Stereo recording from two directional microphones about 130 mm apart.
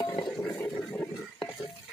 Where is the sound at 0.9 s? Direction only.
15° left (ahead or behind).